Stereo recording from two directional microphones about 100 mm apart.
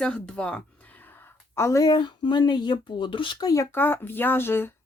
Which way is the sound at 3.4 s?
35° left (ahead or behind).